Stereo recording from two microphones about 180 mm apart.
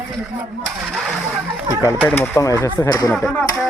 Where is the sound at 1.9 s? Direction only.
5° left (ahead or behind).